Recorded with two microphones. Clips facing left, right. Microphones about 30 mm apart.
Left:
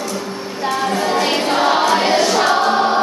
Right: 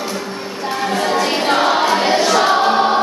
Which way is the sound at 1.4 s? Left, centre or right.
Centre.